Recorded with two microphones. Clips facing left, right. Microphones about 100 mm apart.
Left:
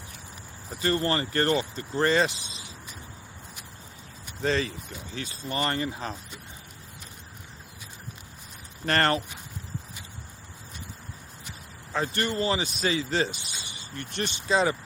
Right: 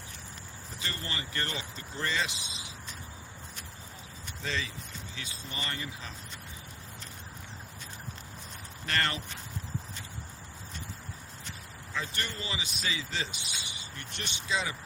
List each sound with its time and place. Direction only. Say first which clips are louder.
0.8 s speech: left 13 dB; 50° left (ahead or behind)
4.4 s speech: left 9 dB; 45° left (ahead or behind)
8.9 s speech: left 8 dB; 45° left (ahead or behind)
11.9 s speech: left 9 dB; 50° left (ahead or behind)